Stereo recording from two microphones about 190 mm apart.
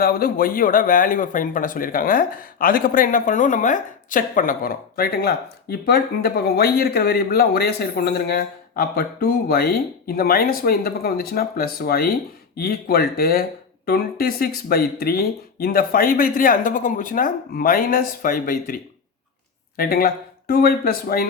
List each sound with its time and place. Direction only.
0.0 s speech: 50° left (ahead or behind)